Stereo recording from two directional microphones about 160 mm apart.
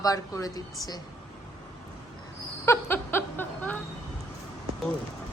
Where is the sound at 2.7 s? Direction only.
15° left (ahead or behind).